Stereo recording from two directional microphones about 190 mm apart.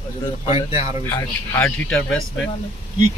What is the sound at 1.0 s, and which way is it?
Speech, 10° left (ahead or behind).